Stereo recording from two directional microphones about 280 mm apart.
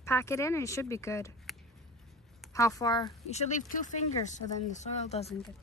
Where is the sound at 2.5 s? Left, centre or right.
Centre.